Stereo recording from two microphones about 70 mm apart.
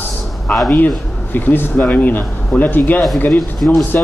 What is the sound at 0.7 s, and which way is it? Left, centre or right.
Speech, left.